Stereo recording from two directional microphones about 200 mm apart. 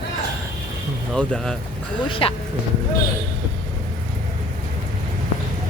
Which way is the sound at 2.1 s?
25° left (ahead or behind).